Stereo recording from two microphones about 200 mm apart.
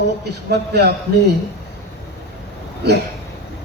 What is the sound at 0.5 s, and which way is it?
Speech, 55° right (ahead or behind).